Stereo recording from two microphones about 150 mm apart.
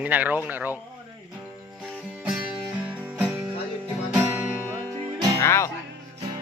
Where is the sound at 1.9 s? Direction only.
5° right (ahead or behind).